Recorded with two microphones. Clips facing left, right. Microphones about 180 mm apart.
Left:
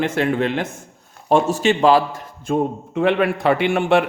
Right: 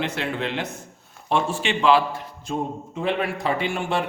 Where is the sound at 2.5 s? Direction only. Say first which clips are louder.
Left 8 dB; 70° left (ahead or behind).